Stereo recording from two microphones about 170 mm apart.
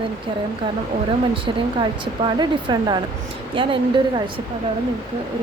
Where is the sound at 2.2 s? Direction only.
25° right (ahead or behind).